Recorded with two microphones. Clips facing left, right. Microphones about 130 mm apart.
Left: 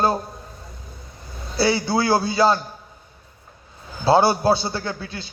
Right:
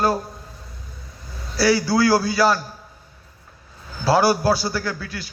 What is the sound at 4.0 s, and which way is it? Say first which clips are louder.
A man's voice: left 1 dB; 25° left (ahead or behind).